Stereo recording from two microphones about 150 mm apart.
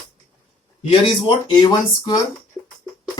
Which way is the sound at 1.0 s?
35° left (ahead or behind).